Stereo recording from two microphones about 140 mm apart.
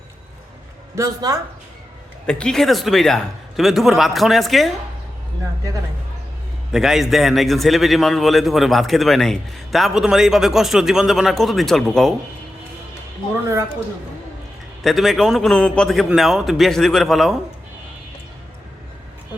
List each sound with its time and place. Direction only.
0.9 s speech: 25° right (ahead or behind)
2.2 s a man's voice: 5° left (ahead or behind)
6.7 s a man's voice: 5° right (ahead or behind)
14.8 s a man's voice: centre (ahead or behind)